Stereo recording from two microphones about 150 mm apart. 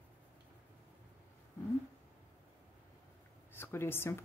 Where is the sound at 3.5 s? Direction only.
15° left (ahead or behind).